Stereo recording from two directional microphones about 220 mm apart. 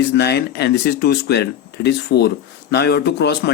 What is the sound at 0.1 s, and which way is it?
Speech, 50° left (ahead or behind).